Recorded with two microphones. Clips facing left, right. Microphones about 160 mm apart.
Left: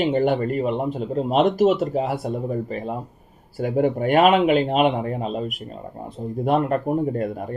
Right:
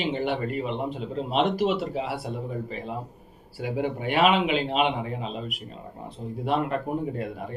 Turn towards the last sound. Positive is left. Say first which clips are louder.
# left 6 dB
turn(degrees=45)  # may be behind; listen again after turning